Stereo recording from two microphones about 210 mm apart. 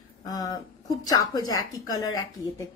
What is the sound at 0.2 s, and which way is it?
Speech, 20° left (ahead or behind).